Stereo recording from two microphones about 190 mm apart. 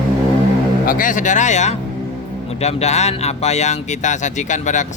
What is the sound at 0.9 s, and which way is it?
A man's voice, 45° left (ahead or behind).